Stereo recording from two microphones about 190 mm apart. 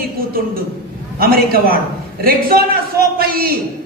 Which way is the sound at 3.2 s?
50° right (ahead or behind).